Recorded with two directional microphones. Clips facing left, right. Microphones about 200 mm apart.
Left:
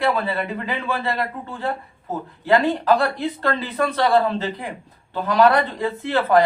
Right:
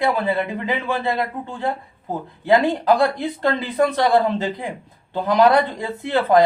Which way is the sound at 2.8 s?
15° right (ahead or behind).